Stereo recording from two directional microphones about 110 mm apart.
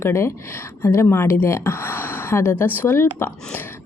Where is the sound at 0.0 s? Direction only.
25° left (ahead or behind).